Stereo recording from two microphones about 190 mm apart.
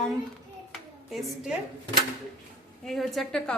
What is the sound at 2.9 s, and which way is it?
Speech, centre (ahead or behind).